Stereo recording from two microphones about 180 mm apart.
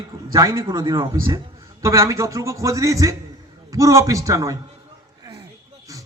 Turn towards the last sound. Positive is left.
turn(degrees=-15)  # may be behind; listen again after turning